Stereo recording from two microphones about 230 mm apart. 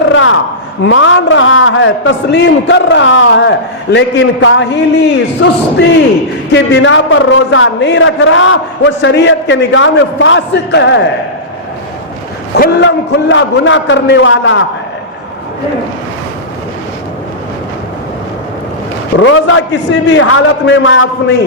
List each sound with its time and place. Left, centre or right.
0.1 s a sound: left
0.9 s a man's voice: left
6.5 s a man's voice: left
12.5 s a man's voice: left
19.1 s a man's voice: left